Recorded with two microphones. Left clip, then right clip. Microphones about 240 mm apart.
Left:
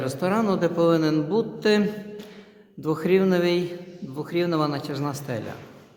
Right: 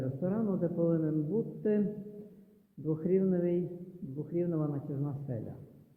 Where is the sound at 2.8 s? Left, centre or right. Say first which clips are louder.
Left 9 dB; centre.